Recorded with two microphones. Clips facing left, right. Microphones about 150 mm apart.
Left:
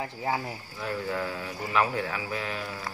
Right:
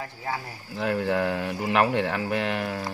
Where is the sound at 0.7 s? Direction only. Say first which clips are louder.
Right 7 dB; 75° right (ahead or behind).